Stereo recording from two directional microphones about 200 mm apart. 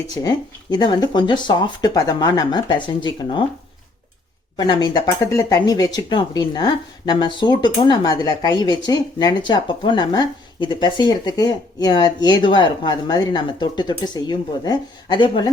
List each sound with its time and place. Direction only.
0.1 s speech: 20° left (ahead or behind)
4.5 s speech: 20° left (ahead or behind)